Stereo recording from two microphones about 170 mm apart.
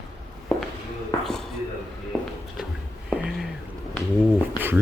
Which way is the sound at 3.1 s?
Centre (ahead or behind).